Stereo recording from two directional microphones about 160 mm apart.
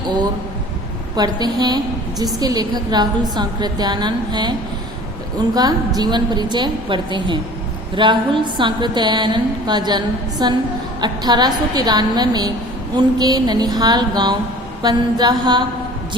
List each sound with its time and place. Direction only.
1.1 s a woman's voice: 25° right (ahead or behind)
5.5 s a woman's voice: 25° right (ahead or behind)